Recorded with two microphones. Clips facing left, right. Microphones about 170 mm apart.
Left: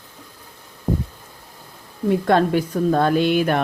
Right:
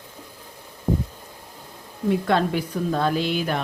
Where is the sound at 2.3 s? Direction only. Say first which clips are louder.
Left 5 dB; 45° left (ahead or behind).